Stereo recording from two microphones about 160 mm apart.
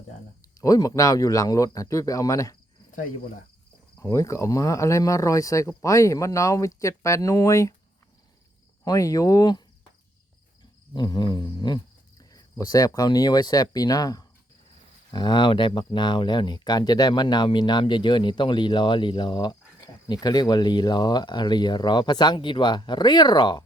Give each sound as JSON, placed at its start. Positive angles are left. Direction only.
{"t": 0.6, "sound": "speech", "side_deg": 20}
{"t": 4.0, "sound": "speech", "side_deg": 20}
{"t": 8.8, "sound": "speech", "side_deg": 20}
{"t": 10.9, "sound": "speech", "side_deg": 25}